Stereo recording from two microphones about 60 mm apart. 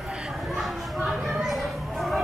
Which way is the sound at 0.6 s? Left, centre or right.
Centre.